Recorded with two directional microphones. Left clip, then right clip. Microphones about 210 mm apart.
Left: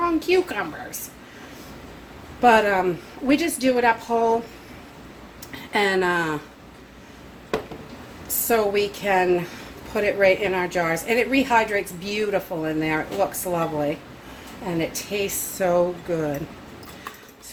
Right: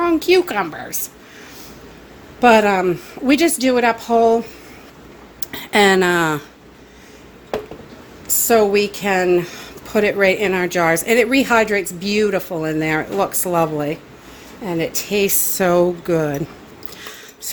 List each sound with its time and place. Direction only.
0.0 s a woman's voice: 55° right (ahead or behind)
2.4 s a woman's voice: 50° right (ahead or behind)
5.4 s speech: 55° right (ahead or behind)
8.4 s a woman's voice: 50° right (ahead or behind)